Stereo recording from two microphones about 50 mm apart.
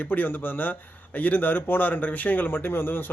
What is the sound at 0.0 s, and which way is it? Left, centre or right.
Speech, left.